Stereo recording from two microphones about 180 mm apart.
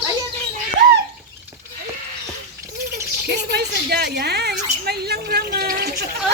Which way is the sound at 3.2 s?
65° right (ahead or behind).